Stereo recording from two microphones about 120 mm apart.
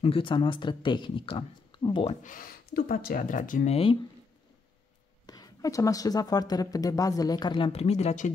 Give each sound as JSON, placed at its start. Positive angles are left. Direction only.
{"t": 0.0, "sound": "speech", "side_deg": 45}
{"t": 3.3, "sound": "speech", "side_deg": 90}
{"t": 3.7, "sound": "speech", "side_deg": 50}
{"t": 5.2, "sound": "speech", "side_deg": 35}